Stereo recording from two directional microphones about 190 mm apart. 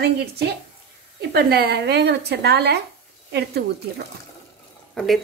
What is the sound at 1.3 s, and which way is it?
A woman's voice, 55° right (ahead or behind).